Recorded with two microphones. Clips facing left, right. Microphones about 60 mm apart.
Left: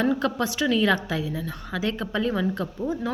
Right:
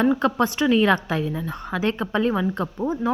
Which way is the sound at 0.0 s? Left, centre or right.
Right.